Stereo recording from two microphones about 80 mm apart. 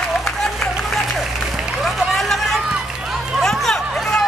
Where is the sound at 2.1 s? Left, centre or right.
Centre.